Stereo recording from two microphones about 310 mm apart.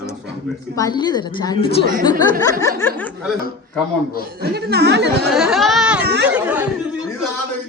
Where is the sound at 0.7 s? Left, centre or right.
Centre.